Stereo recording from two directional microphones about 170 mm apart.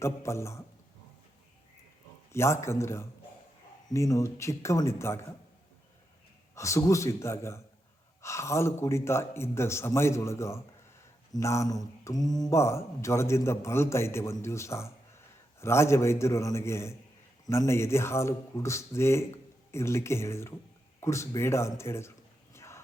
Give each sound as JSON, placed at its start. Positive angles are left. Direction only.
{"t": 0.0, "sound": "speech", "side_deg": 15}
{"t": 2.3, "sound": "speech", "side_deg": 15}
{"t": 6.6, "sound": "speech", "side_deg": 15}
{"t": 22.5, "sound": "a sound", "side_deg": 15}